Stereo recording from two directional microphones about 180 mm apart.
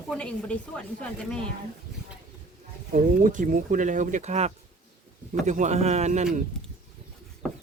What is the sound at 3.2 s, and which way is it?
Speech, 45° right (ahead or behind).